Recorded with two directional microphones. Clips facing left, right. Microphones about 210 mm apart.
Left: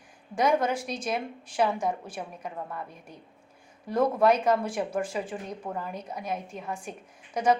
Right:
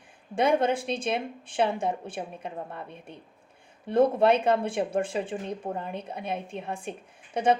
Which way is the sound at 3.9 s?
30° right (ahead or behind).